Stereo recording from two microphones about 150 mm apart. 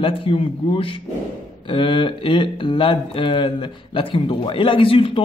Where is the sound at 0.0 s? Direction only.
40° left (ahead or behind).